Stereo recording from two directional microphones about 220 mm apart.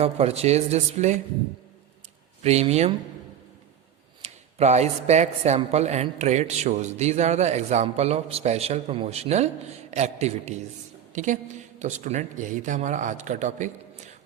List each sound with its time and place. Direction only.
0.0 s a man's voice: 30° right (ahead or behind)
2.4 s a man's voice: 30° right (ahead or behind)
4.2 s speech: 30° right (ahead or behind)